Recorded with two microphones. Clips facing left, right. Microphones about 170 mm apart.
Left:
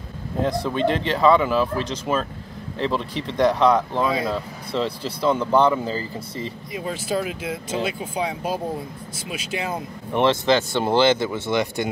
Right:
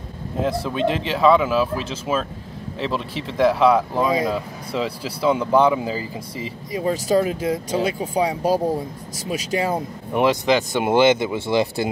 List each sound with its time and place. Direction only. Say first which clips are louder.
0.4 s speech: even; 5° right (ahead or behind)
6.7 s speech: right 7 dB; 40° right (ahead or behind)
10.1 s speech: right 1 dB; 10° right (ahead or behind)